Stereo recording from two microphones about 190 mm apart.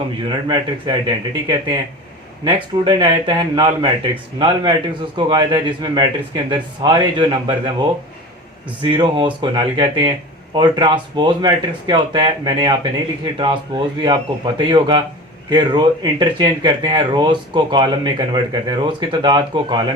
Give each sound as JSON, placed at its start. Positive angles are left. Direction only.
{"t": 0.3, "sound": "speech", "side_deg": -25}
{"t": 8.8, "sound": "speech", "side_deg": -25}